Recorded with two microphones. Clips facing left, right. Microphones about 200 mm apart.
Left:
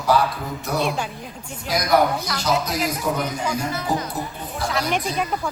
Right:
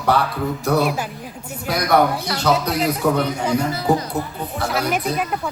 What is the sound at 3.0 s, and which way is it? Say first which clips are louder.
Speech: right 5 dB; 60° right (ahead or behind).